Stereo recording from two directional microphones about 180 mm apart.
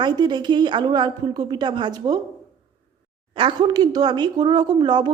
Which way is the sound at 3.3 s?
25° right (ahead or behind).